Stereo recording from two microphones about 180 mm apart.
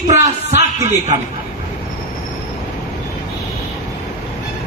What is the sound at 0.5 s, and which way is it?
Music, 40° right (ahead or behind).